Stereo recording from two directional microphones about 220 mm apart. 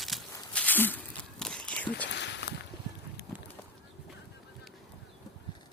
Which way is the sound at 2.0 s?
50° left (ahead or behind).